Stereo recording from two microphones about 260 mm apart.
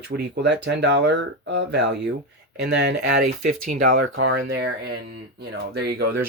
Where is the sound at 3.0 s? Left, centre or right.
Right.